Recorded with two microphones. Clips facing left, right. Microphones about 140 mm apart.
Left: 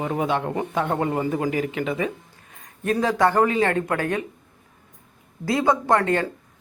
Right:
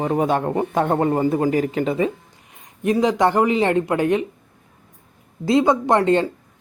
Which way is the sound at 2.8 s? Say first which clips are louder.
Right 3 dB; 15° right (ahead or behind).